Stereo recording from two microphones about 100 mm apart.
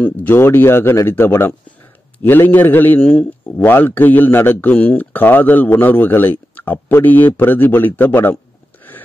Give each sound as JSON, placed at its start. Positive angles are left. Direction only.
{"t": 0.0, "sound": "speech", "side_deg": 20}